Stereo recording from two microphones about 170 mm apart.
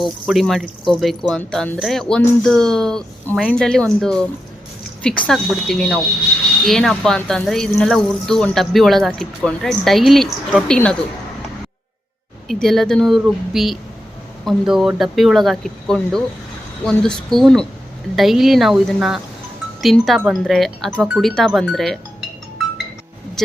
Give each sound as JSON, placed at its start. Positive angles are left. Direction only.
{"t": 0.0, "sound": "speech", "side_deg": 0}
{"t": 12.5, "sound": "speech", "side_deg": 0}